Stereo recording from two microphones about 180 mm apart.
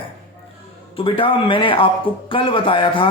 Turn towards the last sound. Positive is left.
turn(degrees=30)  # may be behind; listen again after turning